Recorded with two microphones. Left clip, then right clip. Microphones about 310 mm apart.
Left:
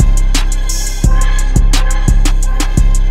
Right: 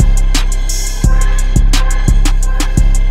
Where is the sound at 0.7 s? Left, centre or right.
Centre.